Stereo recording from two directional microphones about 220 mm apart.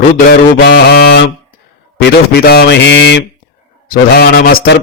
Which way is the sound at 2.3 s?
45° left (ahead or behind).